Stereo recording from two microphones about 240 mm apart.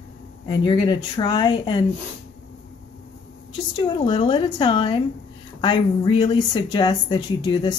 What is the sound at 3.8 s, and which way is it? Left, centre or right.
Speech, left.